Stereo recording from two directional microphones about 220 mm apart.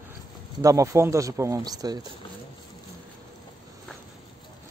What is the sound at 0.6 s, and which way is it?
Speech, 15° right (ahead or behind).